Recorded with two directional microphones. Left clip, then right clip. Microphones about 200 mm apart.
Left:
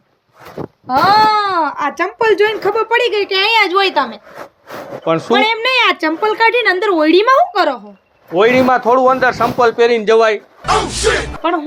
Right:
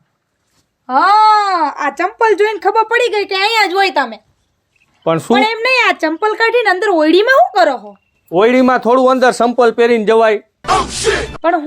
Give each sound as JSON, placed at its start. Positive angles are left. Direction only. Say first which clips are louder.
{"t": 0.9, "sound": "a sound", "louder": "right 2 dB", "side_deg": -10}
{"t": 1.5, "sound": "speech", "louder": "right 1 dB", "side_deg": 5}
{"t": 5.3, "sound": "speech", "louder": "right 1 dB", "side_deg": 0}
{"t": 8.3, "sound": "a man's voice", "louder": "even", "side_deg": -50}
{"t": 10.6, "sound": "speech", "louder": "even", "side_deg": 0}